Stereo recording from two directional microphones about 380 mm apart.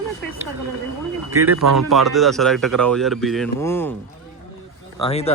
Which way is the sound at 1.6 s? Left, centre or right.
Right.